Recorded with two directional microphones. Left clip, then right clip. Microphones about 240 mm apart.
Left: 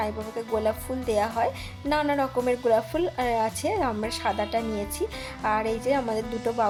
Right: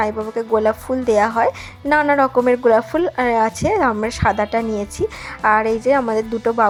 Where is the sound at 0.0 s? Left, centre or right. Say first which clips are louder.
Right 10 dB; centre.